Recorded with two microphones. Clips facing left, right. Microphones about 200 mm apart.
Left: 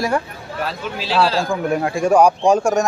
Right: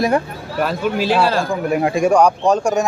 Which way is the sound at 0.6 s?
55° right (ahead or behind).